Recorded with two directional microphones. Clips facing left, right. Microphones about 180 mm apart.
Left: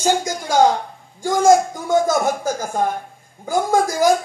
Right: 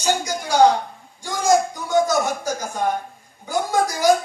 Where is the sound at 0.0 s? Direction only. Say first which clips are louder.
Left 3 dB; 50° left (ahead or behind).